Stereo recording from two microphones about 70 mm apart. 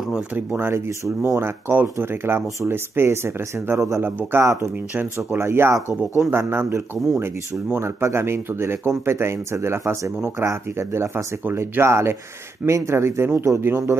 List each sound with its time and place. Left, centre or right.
0.3 s speech: right
0.7 s speech: right
4.9 s speech: right